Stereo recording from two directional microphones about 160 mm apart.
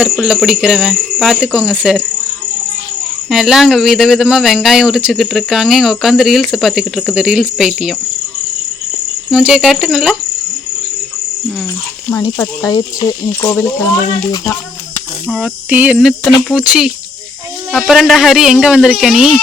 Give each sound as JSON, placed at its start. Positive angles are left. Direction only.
{"t": 0.0, "sound": "speech", "side_deg": -5}
{"t": 3.2, "sound": "speech", "side_deg": 0}
{"t": 9.3, "sound": "speech", "side_deg": -5}
{"t": 12.1, "sound": "speech", "side_deg": 20}
{"t": 15.3, "sound": "speech", "side_deg": -5}